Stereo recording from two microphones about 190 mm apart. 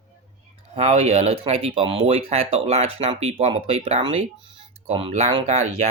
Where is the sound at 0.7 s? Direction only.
35° right (ahead or behind).